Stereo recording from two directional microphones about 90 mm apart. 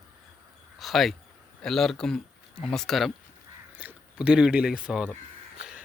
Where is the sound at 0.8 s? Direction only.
Centre (ahead or behind).